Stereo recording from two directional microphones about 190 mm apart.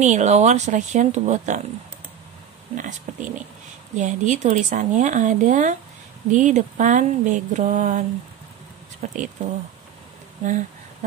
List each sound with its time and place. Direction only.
0.0 s speech: 35° right (ahead or behind)
2.7 s speech: 40° right (ahead or behind)
9.0 s speech: 40° right (ahead or behind)
10.4 s a sound: 40° right (ahead or behind)